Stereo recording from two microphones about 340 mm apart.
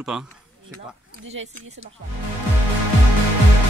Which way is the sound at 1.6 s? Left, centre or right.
Centre.